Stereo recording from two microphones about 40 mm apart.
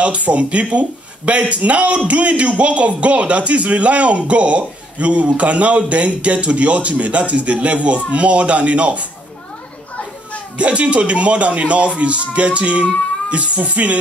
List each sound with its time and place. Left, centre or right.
0.0 s speech: right
10.6 s speech: right